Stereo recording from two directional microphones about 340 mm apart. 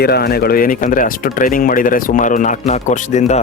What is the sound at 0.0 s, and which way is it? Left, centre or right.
Speech, left.